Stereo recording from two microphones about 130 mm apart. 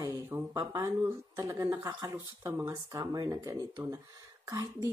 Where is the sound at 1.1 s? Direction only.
25° right (ahead or behind).